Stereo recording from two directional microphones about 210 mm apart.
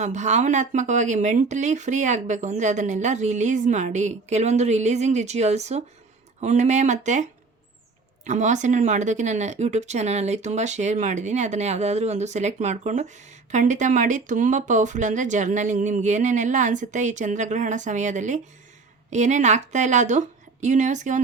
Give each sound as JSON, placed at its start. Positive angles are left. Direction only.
{"t": 0.0, "sound": "speech", "side_deg": -35}